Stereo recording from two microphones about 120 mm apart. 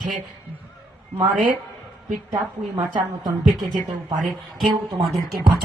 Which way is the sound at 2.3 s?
40° right (ahead or behind).